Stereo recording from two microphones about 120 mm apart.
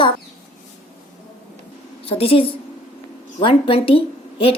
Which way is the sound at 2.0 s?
55° left (ahead or behind).